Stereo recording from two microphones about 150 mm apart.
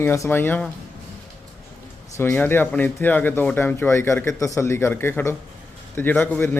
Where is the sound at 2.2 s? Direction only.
15° left (ahead or behind).